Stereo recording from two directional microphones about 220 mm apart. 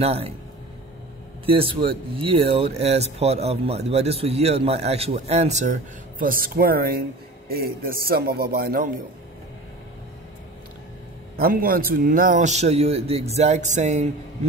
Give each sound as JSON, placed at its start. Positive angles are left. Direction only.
{"t": 0.0, "sound": "speech", "side_deg": -25}
{"t": 1.4, "sound": "speech", "side_deg": -25}
{"t": 11.3, "sound": "a man's voice", "side_deg": -40}